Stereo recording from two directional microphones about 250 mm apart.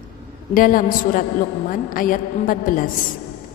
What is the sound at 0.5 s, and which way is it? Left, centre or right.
A woman's voice, left.